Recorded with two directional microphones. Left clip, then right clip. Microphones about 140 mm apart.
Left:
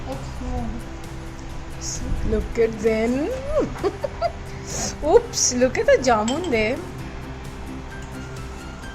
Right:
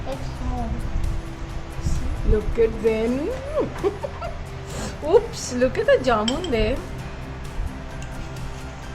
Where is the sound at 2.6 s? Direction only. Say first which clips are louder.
Left 1 dB; 10° left (ahead or behind).